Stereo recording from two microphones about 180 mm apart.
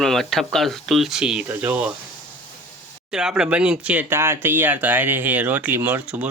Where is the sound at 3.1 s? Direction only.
5° right (ahead or behind).